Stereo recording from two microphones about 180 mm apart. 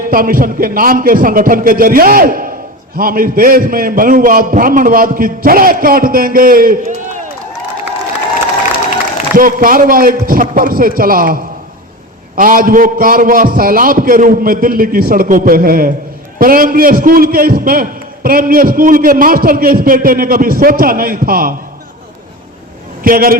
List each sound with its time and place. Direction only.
0.1 s a man's voice: 50° right (ahead or behind)
9.4 s a man's voice: 50° right (ahead or behind)
12.4 s a man's voice: 50° right (ahead or behind)
23.0 s a man's voice: 55° right (ahead or behind)